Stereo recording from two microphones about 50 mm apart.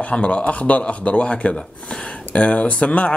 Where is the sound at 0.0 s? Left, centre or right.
Left.